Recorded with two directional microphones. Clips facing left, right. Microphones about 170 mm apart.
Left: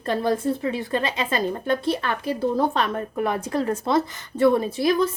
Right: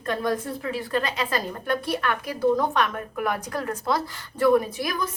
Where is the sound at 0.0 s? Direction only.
30° left (ahead or behind).